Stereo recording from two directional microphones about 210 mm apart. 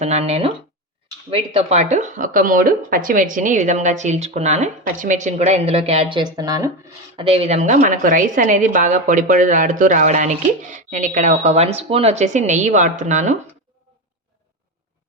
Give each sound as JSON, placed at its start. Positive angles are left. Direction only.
{"t": 0.0, "sound": "speech", "side_deg": -30}